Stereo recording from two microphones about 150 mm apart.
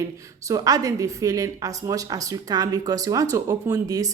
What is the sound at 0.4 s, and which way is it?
A woman's voice, 25° right (ahead or behind).